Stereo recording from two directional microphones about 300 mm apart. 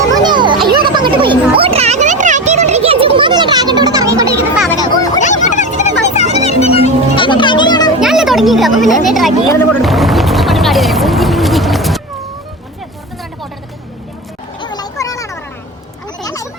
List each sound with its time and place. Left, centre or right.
0.1 s children playing: centre
0.7 s a sound: centre
3.2 s children playing: centre
4.5 s children playing: centre
4.8 s a sound: centre
5.2 s music: left
8.0 s children playing: centre
9.8 s vehicle: centre
14.6 s a sound: centre